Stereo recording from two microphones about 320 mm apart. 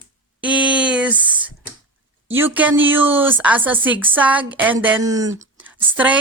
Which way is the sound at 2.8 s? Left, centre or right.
Centre.